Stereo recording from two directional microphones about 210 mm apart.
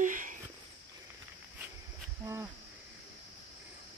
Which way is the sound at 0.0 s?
40° right (ahead or behind).